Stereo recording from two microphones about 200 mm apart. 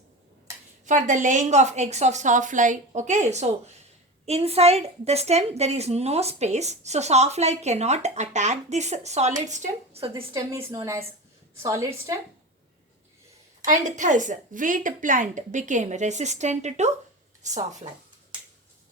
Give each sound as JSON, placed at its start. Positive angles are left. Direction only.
{"t": 0.9, "sound": "a woman's voice", "side_deg": -40}
{"t": 10.3, "sound": "a woman's voice", "side_deg": -15}
{"t": 13.7, "sound": "a woman's voice", "side_deg": -40}